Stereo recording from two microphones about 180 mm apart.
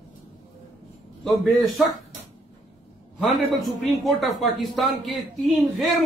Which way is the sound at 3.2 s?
Centre (ahead or behind).